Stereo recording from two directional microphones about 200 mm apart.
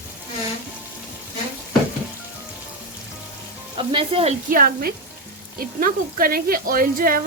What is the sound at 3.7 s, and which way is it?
Frying, 25° right (ahead or behind).